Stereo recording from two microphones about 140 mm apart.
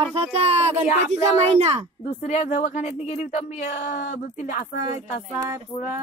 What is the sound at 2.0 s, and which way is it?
Speech, 55° left (ahead or behind).